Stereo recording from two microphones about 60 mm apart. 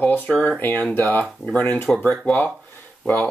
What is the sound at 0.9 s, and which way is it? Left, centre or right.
Speech, left.